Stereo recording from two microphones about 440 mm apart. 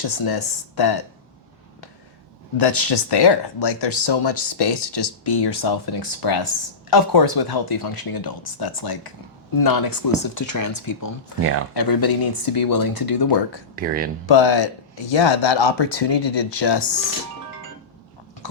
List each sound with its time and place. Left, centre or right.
0.0 s speech: left
2.6 s speech: left
13.7 s speech: centre
14.3 s speech: left